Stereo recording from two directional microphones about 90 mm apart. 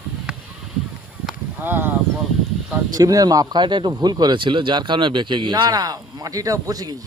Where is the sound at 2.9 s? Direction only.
40° right (ahead or behind).